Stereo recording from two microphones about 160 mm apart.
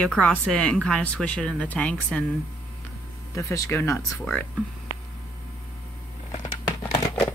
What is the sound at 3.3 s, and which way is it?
Speech, 20° left (ahead or behind).